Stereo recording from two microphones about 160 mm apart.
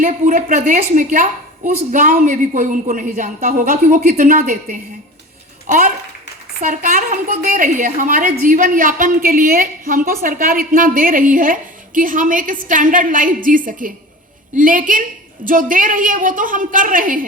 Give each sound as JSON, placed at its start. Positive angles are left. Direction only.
{"t": 0.0, "sound": "a woman's voice", "side_deg": -55}
{"t": 6.6, "sound": "a woman's voice", "side_deg": -55}